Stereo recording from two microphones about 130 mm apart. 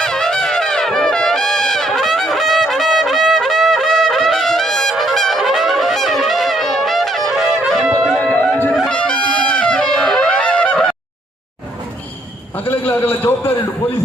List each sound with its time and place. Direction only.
0.0 s music: 5° left (ahead or behind)
8.7 s wind instrument: 5° left (ahead or behind)
12.5 s a sound: 15° left (ahead or behind)